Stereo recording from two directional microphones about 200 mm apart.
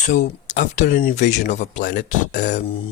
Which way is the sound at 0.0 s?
40° left (ahead or behind).